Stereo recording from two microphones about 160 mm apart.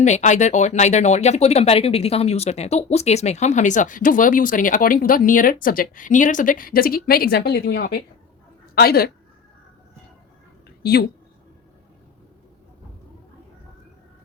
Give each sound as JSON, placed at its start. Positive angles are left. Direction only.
{"t": 0.0, "sound": "speech", "side_deg": 50}
{"t": 8.7, "sound": "a woman's voice", "side_deg": 75}